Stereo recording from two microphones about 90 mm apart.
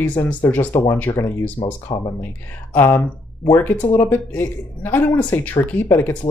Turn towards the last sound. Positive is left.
turn(degrees=20)  # may be behind; listen again after turning